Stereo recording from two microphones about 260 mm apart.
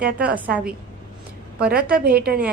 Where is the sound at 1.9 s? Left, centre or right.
Right.